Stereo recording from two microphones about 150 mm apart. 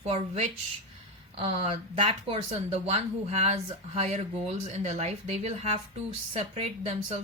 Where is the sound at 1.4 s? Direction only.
35° right (ahead or behind).